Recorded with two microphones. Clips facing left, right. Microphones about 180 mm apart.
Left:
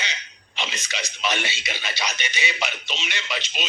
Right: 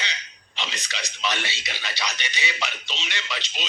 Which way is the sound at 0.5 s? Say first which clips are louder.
Left 2 dB; 20° left (ahead or behind).